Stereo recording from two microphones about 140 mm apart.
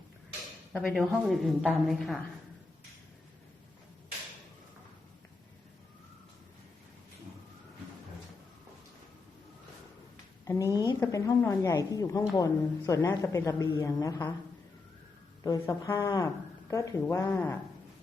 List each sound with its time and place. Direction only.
0.7 s a woman's voice: centre (ahead or behind)
10.4 s a woman's voice: 25° left (ahead or behind)
15.4 s a woman's voice: 25° left (ahead or behind)